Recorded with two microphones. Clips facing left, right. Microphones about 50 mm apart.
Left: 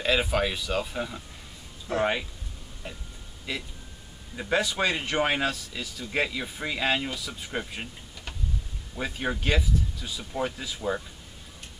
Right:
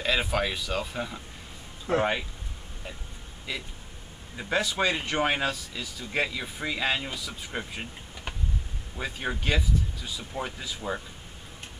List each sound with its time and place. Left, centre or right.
0.0 s speech: centre
1.9 s speech: right
3.5 s speech: centre
8.9 s speech: centre